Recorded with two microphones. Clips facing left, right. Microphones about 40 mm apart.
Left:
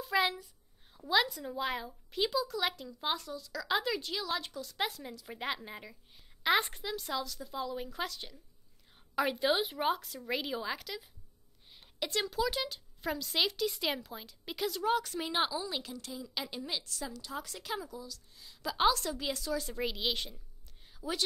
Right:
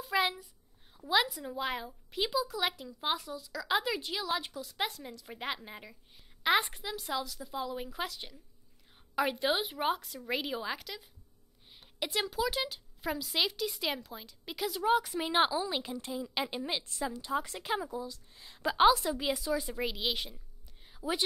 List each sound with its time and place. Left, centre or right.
0.0 s a sound: centre
1.0 s a woman's voice: centre
14.8 s a woman's voice: centre; by 18.8 s right
18.8 s a woman's voice: centre
19.8 s a woman's voice: centre
20.9 s a sound: centre